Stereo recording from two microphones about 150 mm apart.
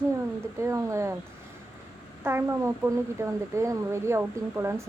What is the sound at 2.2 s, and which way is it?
Speech, 15° right (ahead or behind).